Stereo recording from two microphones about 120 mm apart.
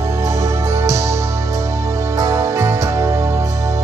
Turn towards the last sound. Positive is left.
turn(degrees=-25)  # may be behind; listen again after turning